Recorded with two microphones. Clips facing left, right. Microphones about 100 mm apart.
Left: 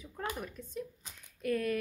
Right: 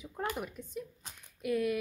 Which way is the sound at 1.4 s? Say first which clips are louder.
Right 1 dB; 10° right (ahead or behind).